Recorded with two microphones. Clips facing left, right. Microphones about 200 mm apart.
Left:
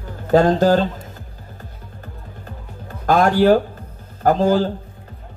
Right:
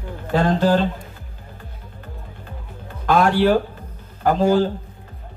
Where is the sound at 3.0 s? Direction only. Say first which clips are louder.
Left 2 dB; 45° left (ahead or behind).